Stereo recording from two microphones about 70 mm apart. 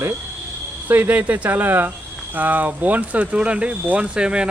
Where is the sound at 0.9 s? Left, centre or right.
Right.